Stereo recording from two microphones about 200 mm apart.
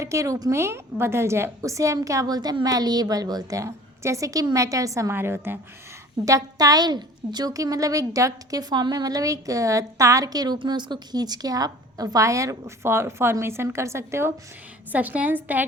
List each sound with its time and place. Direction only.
0.0 s a woman's voice: 15° right (ahead or behind)